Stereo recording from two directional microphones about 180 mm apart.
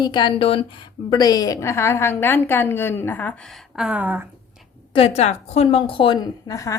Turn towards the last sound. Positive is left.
turn(degrees=20)  # may be behind; listen again after turning